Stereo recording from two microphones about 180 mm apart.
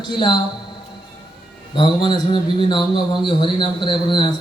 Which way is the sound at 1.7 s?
25° left (ahead or behind).